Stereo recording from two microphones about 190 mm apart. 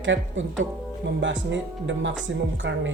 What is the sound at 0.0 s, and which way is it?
Speech, 80° right.